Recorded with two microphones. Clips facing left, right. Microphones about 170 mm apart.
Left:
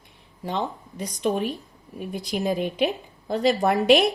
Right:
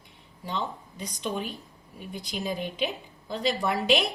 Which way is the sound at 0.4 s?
55° left (ahead or behind).